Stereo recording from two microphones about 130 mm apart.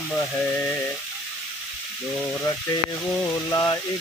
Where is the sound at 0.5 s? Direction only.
15° left (ahead or behind).